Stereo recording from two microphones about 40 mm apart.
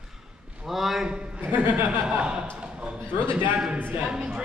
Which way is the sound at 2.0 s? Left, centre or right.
Right.